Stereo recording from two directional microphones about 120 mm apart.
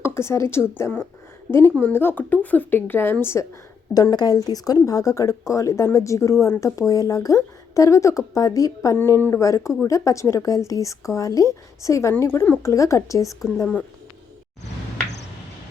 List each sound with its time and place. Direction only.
0.0 s speech: 20° left (ahead or behind)
3.9 s speech: 35° left (ahead or behind)